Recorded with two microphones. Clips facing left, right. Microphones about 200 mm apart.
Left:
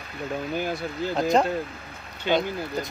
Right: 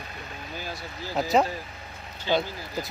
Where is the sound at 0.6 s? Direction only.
55° left (ahead or behind).